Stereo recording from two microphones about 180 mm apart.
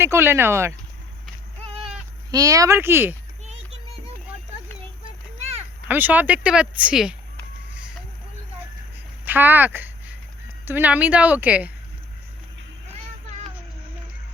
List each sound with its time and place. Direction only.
0.0 s speech: 15° right (ahead or behind)
1.6 s sheep: 35° right (ahead or behind)
2.3 s speech: 20° right (ahead or behind)
3.4 s music: 35° right (ahead or behind)
5.9 s speech: 10° right (ahead or behind)
9.2 s a sound: 10° right (ahead or behind)
10.7 s speech: 10° right (ahead or behind)